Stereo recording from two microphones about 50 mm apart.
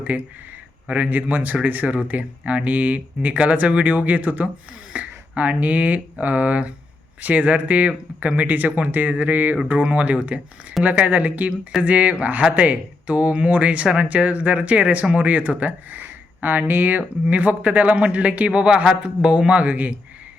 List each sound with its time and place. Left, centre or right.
0.0 s speech: right
4.9 s a sound: right
5.4 s speech: right